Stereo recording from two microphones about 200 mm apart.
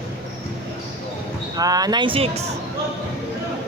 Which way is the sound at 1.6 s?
20° right (ahead or behind).